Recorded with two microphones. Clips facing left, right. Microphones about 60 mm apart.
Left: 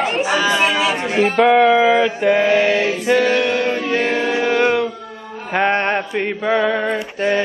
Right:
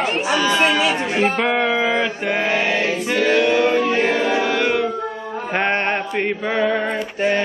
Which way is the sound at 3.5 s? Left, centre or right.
Centre.